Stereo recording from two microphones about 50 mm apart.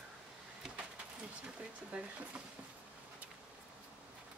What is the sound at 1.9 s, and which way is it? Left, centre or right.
Speech, right.